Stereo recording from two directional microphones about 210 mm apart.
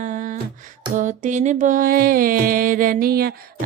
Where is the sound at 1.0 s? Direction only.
35° right (ahead or behind).